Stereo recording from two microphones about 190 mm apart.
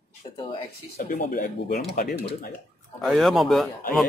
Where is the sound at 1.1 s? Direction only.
50° left (ahead or behind).